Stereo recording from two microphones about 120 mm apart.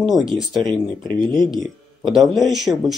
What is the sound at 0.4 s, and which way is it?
Speech, 5° right (ahead or behind).